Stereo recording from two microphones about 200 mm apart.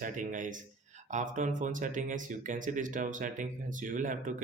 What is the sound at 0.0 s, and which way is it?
Speech, 40° right (ahead or behind).